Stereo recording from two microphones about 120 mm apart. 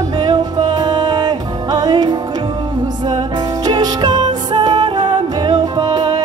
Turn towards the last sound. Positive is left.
turn(degrees=-35)  # may be behind; listen again after turning